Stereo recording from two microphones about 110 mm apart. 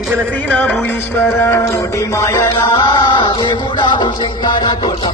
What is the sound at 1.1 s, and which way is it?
Music, 20° left (ahead or behind).